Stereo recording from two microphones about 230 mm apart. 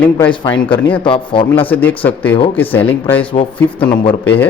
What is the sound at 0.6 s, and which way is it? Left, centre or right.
Speech, left.